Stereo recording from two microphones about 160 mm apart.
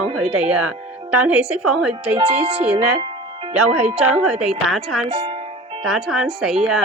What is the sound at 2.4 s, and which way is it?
Speech, 35° right (ahead or behind).